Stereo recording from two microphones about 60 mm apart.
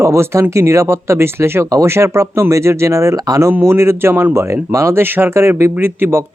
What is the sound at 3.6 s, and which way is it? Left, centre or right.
Speech, right.